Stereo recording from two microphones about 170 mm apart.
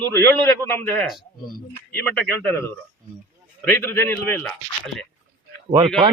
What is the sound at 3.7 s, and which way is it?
A man's voice, 15° left (ahead or behind).